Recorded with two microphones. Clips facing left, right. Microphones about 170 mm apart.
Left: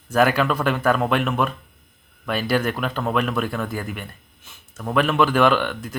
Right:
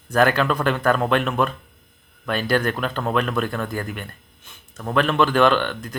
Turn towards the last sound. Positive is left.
turn(degrees=5)  # may be behind; listen again after turning